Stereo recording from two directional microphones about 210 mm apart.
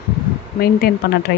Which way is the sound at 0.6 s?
45° left (ahead or behind).